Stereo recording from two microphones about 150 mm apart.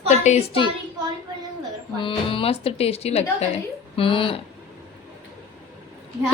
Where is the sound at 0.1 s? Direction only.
50° left (ahead or behind).